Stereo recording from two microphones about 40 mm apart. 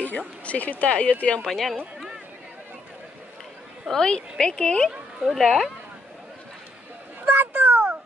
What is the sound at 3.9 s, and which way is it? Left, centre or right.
Speech, centre.